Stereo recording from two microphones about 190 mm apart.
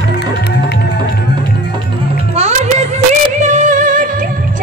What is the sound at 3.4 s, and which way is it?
Music, 40° right (ahead or behind).